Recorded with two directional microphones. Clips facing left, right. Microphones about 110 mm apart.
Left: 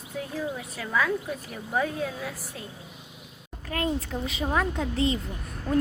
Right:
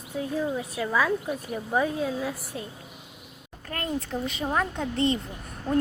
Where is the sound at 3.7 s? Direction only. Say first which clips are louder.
Left 2 dB; 5° left (ahead or behind).